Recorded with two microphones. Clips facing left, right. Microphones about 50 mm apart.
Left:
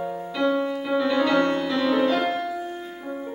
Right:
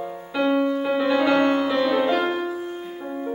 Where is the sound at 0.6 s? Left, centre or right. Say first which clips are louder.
Right 2 dB; centre.